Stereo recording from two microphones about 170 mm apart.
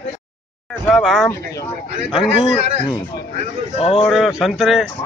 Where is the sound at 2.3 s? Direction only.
35° left (ahead or behind).